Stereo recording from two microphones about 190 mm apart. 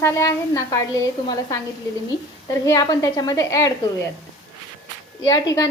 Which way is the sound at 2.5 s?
15° left (ahead or behind).